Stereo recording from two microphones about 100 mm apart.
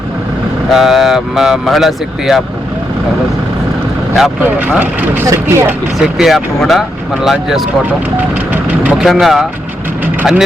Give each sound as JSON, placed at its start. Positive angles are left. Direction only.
{"t": 0.7, "sound": "speech", "side_deg": 0}
{"t": 4.6, "sound": "speech", "side_deg": -15}
{"t": 5.2, "sound": "speech", "side_deg": -25}
{"t": 6.0, "sound": "speech", "side_deg": -5}
{"t": 8.8, "sound": "speech", "side_deg": -10}